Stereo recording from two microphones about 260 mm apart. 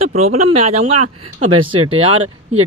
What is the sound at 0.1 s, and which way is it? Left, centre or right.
Speech, right.